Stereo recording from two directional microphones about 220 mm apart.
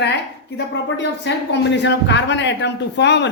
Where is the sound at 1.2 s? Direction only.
55° left (ahead or behind).